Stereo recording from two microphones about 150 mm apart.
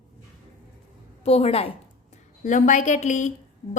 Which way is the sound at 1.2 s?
45° left (ahead or behind).